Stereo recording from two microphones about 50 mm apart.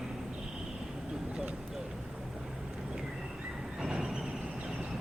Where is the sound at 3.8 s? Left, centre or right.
Centre.